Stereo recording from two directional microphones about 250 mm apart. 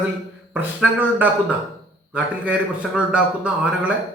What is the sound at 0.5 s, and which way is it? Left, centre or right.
A man's voice, centre.